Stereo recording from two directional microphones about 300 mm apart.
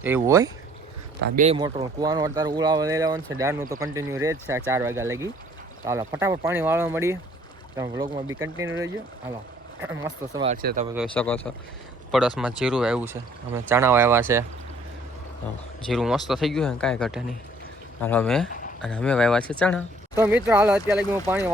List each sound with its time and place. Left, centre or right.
0.0 s speech: centre
1.2 s speech: right
9.8 s speech: centre
10.4 s speech: right
10.9 s speech: centre
12.4 s speech: centre
15.9 s speech: centre
20.1 s speech: centre